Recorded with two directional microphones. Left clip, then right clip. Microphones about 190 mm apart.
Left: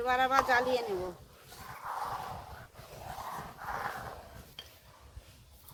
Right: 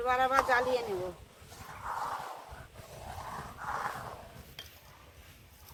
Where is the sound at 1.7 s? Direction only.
20° left (ahead or behind).